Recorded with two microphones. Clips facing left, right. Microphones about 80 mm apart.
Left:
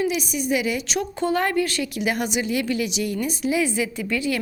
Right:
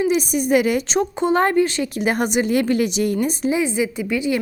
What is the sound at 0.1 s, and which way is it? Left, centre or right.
Speech, right.